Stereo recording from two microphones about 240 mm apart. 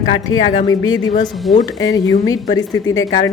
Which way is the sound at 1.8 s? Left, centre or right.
Centre.